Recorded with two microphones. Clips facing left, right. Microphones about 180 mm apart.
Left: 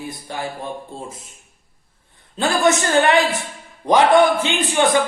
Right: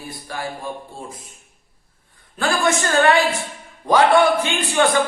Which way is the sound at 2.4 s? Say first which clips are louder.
Left 3 dB; 20° left (ahead or behind).